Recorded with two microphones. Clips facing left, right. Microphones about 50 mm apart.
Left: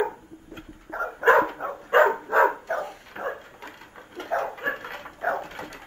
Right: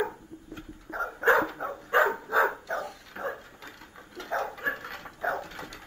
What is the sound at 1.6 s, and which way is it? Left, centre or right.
Dog, left.